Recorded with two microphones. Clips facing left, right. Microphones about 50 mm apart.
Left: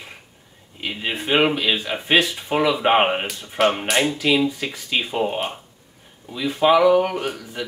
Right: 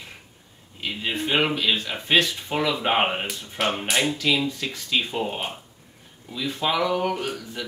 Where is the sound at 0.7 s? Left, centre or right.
Centre.